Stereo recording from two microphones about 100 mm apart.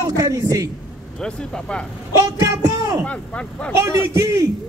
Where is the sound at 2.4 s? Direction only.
40° right (ahead or behind).